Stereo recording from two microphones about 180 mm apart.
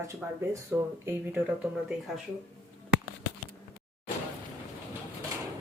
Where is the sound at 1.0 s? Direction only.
10° right (ahead or behind).